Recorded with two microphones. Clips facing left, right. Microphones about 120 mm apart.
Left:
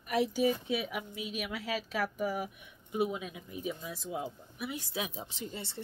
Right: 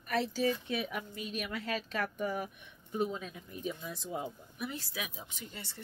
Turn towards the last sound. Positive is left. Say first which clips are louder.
# left 6 dB
turn(degrees=25)  # may be behind; listen again after turning